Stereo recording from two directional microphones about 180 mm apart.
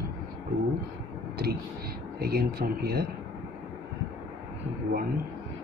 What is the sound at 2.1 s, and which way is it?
Speech, 60° right (ahead or behind).